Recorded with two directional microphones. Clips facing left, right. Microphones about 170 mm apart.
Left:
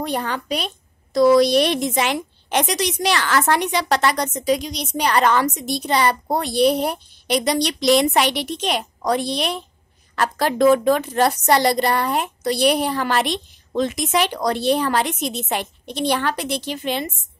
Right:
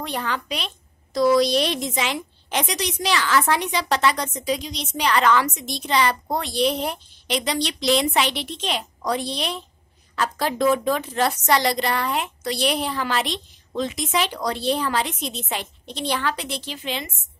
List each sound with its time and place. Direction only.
0.0 s a woman's voice: 40° left (ahead or behind)
8.0 s a woman's voice: 50° left (ahead or behind)
8.5 s a woman's voice: 45° left (ahead or behind)
9.2 s a woman's voice: 65° left (ahead or behind); by 17.0 s 50° left (ahead or behind)